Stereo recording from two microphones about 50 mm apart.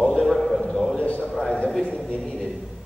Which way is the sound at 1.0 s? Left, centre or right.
Left.